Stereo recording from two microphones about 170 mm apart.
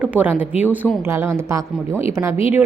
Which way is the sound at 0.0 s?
10° right (ahead or behind).